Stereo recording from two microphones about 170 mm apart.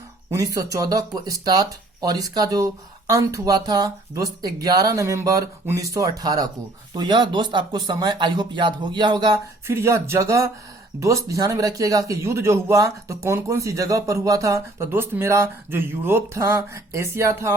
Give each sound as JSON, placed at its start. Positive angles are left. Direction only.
{"t": 0.3, "sound": "speech", "side_deg": -20}